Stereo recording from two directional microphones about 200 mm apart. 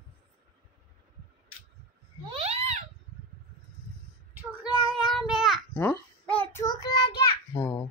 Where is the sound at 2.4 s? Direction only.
30° right (ahead or behind).